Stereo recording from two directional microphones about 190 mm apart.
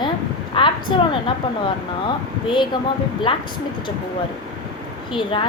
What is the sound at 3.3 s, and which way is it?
Speech, 25° left (ahead or behind).